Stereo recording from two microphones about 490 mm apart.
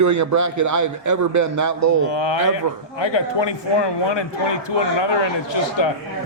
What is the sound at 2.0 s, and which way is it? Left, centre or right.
A man's voice, left.